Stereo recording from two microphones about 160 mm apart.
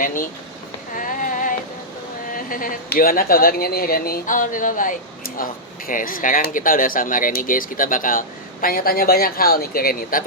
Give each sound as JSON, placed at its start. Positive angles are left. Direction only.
{"t": 0.0, "sound": "speech", "side_deg": 60}
{"t": 0.9, "sound": "a sound", "side_deg": 55}
{"t": 2.3, "sound": "speech", "side_deg": 60}